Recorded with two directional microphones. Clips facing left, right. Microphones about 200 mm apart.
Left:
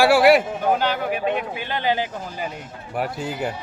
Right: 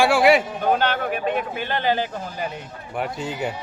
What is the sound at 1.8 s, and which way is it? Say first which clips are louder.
A man's voice: even; 15° left (ahead or behind).